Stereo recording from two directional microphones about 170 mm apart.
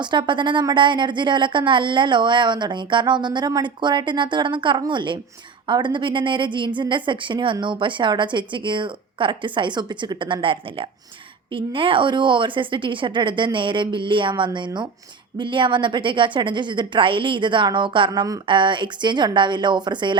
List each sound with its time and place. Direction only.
0.0 s a woman's voice: 25° right (ahead or behind)